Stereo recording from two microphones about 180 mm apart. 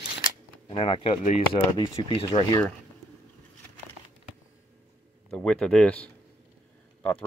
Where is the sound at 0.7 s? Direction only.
30° left (ahead or behind).